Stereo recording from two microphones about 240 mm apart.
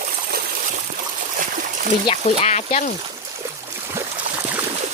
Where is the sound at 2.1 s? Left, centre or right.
Left.